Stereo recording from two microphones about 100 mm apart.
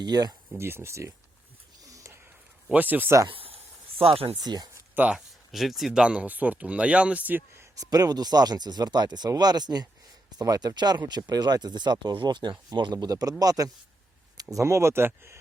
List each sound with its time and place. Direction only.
0.0 s speech: 45° right (ahead or behind)
0.5 s speech: 25° right (ahead or behind)
1.8 s a sound: 35° right (ahead or behind)
2.7 s speech: 15° right (ahead or behind)
3.2 s a sound: 70° right (ahead or behind)
4.0 s speech: 75° right (ahead or behind)
4.4 s speech: 45° right (ahead or behind)
5.1 s speech: centre (ahead or behind); by 7.9 s 25° right (ahead or behind)
7.9 s speech: 40° right (ahead or behind)